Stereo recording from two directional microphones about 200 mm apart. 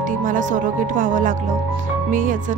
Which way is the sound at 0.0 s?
40° right (ahead or behind).